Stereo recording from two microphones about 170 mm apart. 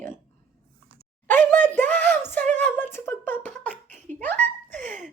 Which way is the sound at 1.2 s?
10° left (ahead or behind).